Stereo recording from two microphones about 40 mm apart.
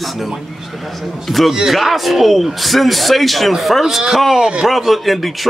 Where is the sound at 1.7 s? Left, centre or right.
Centre.